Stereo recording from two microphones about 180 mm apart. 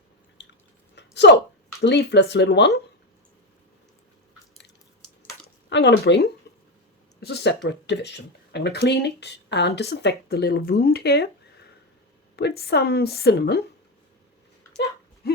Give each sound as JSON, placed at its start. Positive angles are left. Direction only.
{"t": 0.4, "sound": "drip", "side_deg": 75}
{"t": 0.9, "sound": "a sound", "side_deg": 75}
{"t": 1.8, "sound": "speech", "side_deg": 75}
{"t": 5.6, "sound": "speech", "side_deg": 75}
{"t": 6.5, "sound": "a sound", "side_deg": 65}
{"t": 7.2, "sound": "speech", "side_deg": 65}
{"t": 12.4, "sound": "a woman's voice", "side_deg": 65}